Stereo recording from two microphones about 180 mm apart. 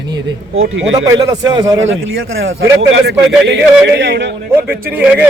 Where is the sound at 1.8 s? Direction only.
90° right.